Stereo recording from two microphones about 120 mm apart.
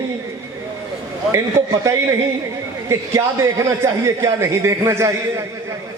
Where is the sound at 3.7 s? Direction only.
25° right (ahead or behind).